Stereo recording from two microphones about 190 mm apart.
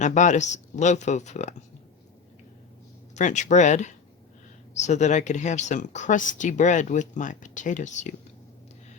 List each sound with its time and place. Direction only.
0.0 s speech: 40° left (ahead or behind)
3.2 s speech: 40° left (ahead or behind)